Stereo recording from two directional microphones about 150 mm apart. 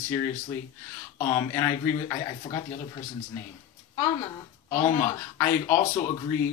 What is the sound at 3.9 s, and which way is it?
Speech, 30° left (ahead or behind).